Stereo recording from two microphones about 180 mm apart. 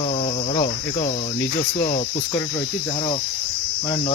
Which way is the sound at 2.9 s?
30° left (ahead or behind).